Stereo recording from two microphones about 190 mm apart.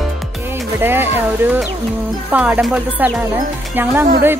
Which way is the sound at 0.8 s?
10° right (ahead or behind).